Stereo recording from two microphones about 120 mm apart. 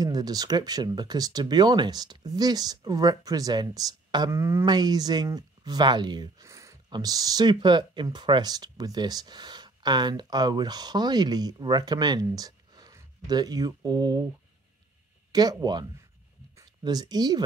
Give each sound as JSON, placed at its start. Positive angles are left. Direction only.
{"t": 0.0, "sound": "speech", "side_deg": -35}
{"t": 4.3, "sound": "speech", "side_deg": -25}
{"t": 4.6, "sound": "speech", "side_deg": -35}
{"t": 15.3, "sound": "speech", "side_deg": -35}